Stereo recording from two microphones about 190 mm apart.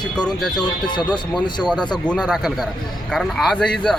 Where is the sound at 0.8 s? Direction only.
25° left (ahead or behind).